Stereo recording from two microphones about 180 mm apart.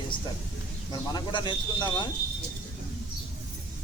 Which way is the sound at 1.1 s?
25° left (ahead or behind).